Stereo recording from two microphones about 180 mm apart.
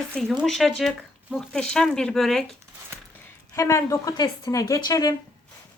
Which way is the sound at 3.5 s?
15° left (ahead or behind).